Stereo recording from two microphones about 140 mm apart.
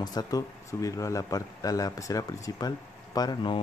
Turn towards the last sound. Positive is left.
turn(degrees=30)  # may be behind; listen again after turning